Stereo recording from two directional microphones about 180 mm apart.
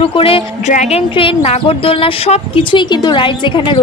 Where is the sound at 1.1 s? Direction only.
30° left (ahead or behind).